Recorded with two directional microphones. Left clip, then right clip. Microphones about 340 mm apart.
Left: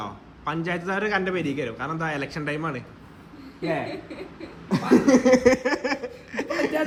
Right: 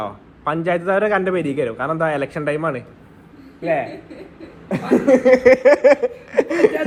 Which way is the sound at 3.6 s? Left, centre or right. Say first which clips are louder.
Right 7 dB; centre.